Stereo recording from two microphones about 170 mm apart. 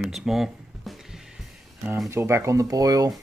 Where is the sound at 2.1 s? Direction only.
15° right (ahead or behind).